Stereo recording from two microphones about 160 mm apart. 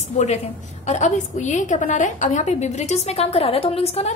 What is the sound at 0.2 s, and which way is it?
A woman's voice, 45° left (ahead or behind).